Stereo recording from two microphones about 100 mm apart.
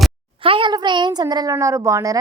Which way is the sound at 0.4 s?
60° right (ahead or behind).